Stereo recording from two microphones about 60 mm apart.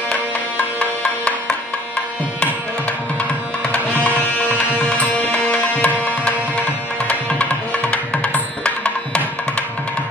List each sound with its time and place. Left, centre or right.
0.1 s music: left
3.2 s music: left
6.0 s tabla: left
7.9 s music: centre